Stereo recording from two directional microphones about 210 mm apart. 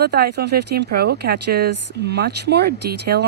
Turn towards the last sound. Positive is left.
turn(degrees=-50)  # may be behind; listen again after turning